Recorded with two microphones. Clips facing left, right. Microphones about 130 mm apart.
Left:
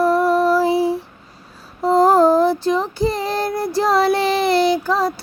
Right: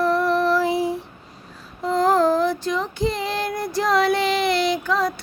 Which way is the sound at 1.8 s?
35° left (ahead or behind).